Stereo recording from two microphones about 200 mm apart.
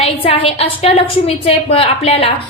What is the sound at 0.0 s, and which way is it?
A woman's voice, 30° left (ahead or behind).